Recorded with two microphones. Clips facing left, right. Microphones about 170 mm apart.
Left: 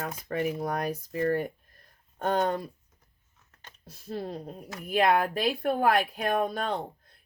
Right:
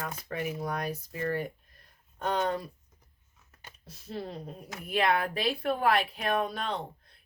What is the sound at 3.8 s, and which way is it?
Speech, 50° left (ahead or behind).